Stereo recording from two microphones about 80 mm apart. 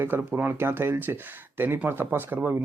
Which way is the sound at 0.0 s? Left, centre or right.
Right.